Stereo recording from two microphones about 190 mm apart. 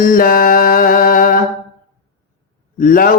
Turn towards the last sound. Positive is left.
turn(degrees=45)  # may be behind; listen again after turning